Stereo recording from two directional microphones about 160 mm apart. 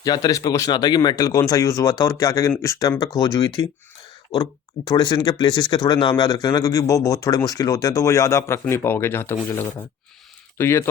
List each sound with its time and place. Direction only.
0.0 s speech: 25° left (ahead or behind)
4.9 s speech: 25° left (ahead or behind)